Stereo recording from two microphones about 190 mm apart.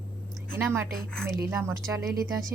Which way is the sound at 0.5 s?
10° right (ahead or behind).